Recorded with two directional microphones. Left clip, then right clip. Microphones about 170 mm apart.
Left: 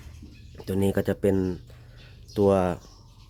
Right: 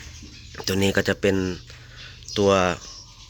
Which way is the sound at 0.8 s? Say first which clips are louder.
Right 3 dB; 15° left (ahead or behind).